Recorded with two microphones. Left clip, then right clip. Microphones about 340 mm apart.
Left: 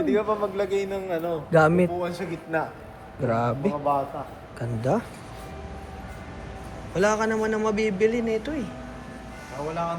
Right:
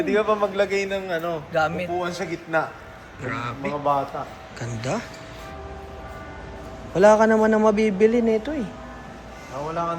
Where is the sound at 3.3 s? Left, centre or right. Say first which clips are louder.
Left 3 dB; centre.